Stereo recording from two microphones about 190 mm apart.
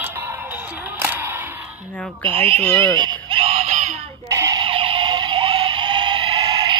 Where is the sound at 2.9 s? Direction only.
25° right (ahead or behind).